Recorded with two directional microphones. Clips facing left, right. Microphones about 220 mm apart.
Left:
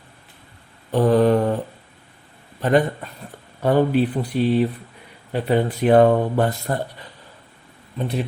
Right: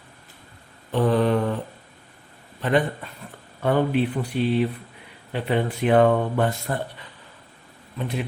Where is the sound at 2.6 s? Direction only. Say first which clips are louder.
Left 4 dB; 40° left (ahead or behind).